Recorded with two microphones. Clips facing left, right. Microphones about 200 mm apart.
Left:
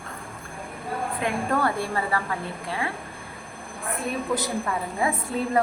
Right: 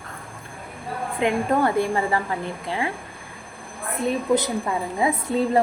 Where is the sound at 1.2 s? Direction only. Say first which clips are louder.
Right 5 dB; 20° right (ahead or behind).